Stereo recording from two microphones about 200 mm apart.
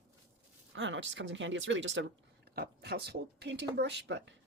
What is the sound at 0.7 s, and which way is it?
Speech, 70° right (ahead or behind).